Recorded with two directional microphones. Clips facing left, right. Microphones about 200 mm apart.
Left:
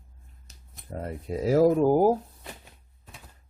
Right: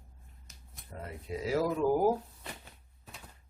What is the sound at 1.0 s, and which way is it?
Speech, 45° left (ahead or behind).